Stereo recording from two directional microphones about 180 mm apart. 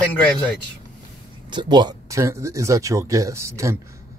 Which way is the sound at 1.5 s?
25° right (ahead or behind).